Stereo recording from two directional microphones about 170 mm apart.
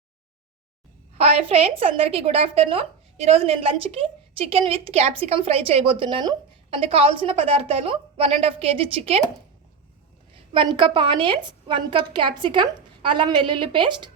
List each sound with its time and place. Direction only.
1.2 s a woman's voice: 35° right (ahead or behind)
10.5 s a woman's voice: 30° right (ahead or behind)